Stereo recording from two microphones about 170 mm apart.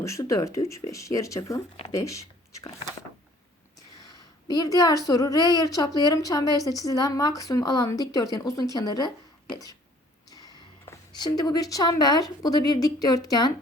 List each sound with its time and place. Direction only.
0.0 s speech: 20° left (ahead or behind)
4.4 s speech: 20° left (ahead or behind)
10.2 s a sound: 20° left (ahead or behind)
11.2 s speech: 25° left (ahead or behind)